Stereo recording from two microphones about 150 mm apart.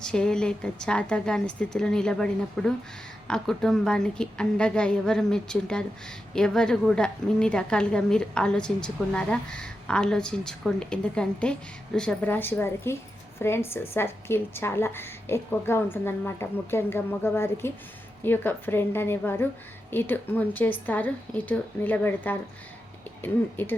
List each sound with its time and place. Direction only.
0.0 s a woman's voice: 5° left (ahead or behind)